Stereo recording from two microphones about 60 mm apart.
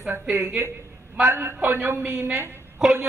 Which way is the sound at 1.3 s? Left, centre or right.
Right.